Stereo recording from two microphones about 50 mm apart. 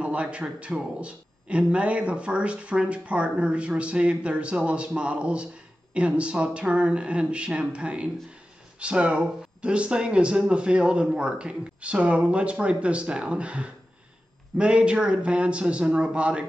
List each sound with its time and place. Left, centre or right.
0.0 s a man's voice: right